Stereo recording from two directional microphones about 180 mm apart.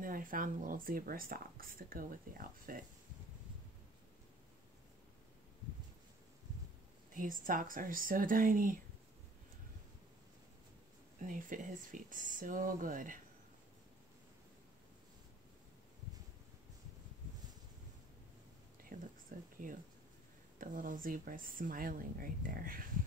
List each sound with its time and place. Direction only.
0.0 s speech: 50° right (ahead or behind)
7.2 s speech: 50° right (ahead or behind)
11.1 s speech: 45° right (ahead or behind)
18.9 s whispering: 45° right (ahead or behind)
19.3 s a sound: 50° right (ahead or behind)
20.5 s speech: 50° right (ahead or behind)